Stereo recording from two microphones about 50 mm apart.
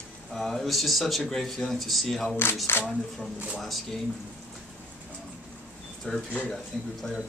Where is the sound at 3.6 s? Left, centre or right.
Centre.